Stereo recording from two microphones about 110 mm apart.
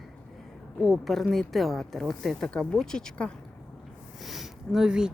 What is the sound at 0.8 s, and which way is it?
A woman's voice, centre (ahead or behind).